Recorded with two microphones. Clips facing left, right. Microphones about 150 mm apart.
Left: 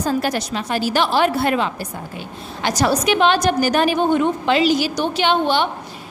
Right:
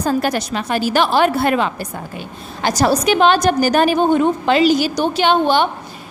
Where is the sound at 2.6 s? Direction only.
40° right (ahead or behind).